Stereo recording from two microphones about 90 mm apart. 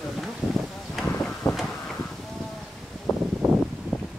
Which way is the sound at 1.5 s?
5° left (ahead or behind).